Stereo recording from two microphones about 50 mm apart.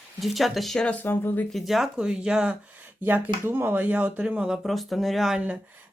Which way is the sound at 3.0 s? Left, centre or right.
Right.